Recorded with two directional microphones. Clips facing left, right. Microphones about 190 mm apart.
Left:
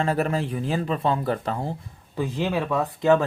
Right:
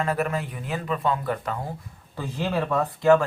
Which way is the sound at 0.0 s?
30° left (ahead or behind).